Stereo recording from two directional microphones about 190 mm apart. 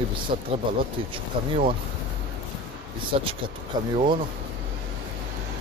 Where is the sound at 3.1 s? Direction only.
30° right (ahead or behind).